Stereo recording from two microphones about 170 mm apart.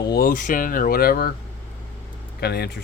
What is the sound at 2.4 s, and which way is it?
Speech, 70° left (ahead or behind).